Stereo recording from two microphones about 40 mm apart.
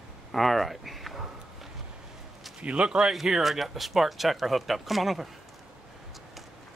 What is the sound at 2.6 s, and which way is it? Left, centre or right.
Speech, right.